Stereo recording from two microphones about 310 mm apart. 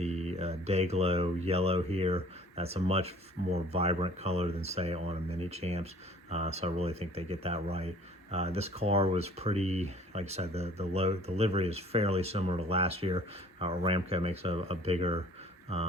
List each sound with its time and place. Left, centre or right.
0.0 s speech: right